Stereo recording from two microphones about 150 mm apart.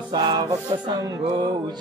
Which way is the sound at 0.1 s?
30° right (ahead or behind).